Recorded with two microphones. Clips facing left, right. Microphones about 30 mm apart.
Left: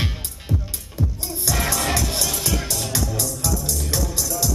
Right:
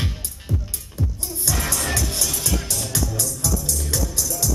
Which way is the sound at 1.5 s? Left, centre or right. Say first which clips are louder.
Left 2 dB; left.